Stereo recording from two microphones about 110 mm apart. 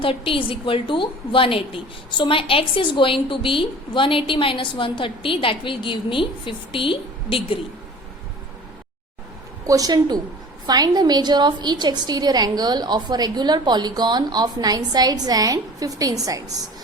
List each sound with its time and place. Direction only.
0.0 s a woman's voice: 55° left (ahead or behind)
9.6 s a woman's voice: 35° right (ahead or behind)